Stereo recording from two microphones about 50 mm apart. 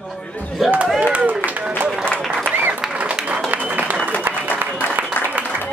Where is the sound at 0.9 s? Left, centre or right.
Right.